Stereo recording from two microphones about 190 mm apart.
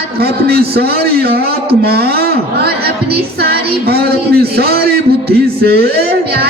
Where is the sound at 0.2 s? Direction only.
55° right (ahead or behind).